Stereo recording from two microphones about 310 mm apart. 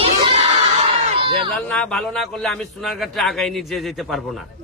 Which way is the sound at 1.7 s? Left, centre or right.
Centre.